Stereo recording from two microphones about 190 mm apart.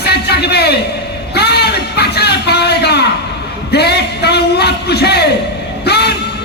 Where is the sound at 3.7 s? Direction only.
60° left (ahead or behind).